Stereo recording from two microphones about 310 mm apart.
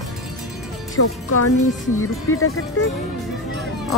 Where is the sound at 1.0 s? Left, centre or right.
Left.